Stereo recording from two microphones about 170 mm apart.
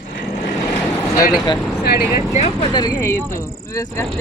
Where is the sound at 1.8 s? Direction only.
65° left (ahead or behind).